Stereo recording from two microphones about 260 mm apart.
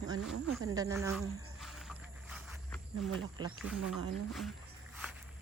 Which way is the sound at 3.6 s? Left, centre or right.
Centre.